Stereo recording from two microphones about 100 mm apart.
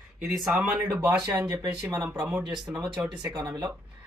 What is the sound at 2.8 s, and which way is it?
Speech, 5° right (ahead or behind).